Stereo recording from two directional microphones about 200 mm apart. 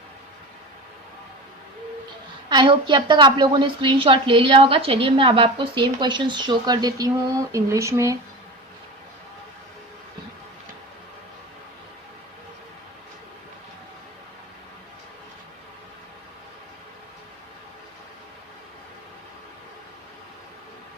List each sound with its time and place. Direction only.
2.5 s a woman's voice: 25° right (ahead or behind)